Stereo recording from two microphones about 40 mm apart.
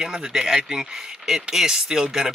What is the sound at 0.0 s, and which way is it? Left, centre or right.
Speech, centre.